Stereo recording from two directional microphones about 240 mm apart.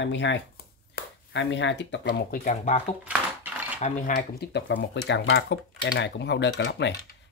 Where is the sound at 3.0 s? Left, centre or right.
Centre.